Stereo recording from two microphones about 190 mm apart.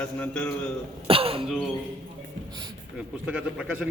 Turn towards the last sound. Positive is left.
turn(degrees=-5)  # may be behind; listen again after turning